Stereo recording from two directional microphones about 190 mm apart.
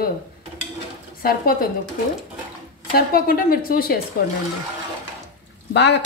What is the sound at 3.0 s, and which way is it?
A woman's voice, 50° left (ahead or behind).